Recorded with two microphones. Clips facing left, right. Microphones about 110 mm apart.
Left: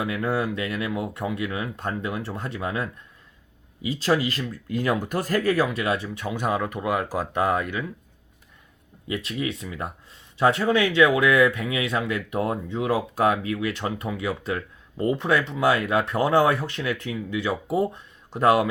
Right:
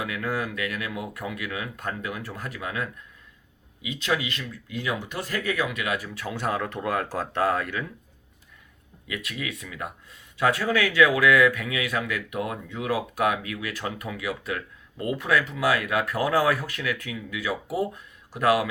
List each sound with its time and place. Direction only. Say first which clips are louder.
0.0 s speech: left 4 dB; 30° left (ahead or behind)
9.0 s speech: left 5 dB; 30° left (ahead or behind)